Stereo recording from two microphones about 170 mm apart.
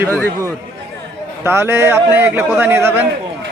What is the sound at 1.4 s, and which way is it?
A man's voice, 15° right (ahead or behind).